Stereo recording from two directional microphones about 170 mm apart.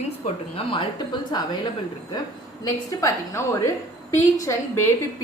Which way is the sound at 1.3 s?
25° left (ahead or behind).